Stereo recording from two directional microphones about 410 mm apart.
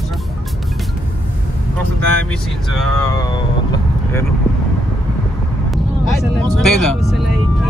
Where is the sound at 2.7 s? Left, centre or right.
Centre.